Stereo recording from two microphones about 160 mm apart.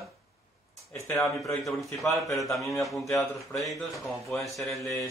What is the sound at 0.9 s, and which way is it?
Speech, 20° left (ahead or behind).